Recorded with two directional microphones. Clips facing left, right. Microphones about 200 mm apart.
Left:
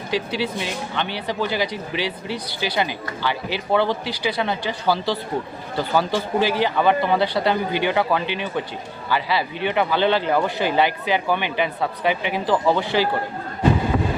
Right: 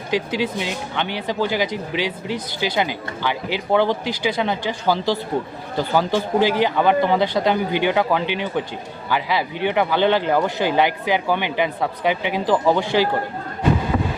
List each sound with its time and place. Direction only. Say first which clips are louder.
0.1 s speech: right 2 dB; 15° right (ahead or behind)